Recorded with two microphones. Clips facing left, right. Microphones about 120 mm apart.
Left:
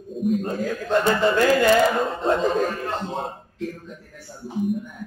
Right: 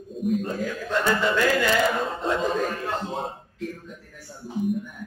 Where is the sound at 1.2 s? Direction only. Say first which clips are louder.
Left 4 dB; 40° left (ahead or behind).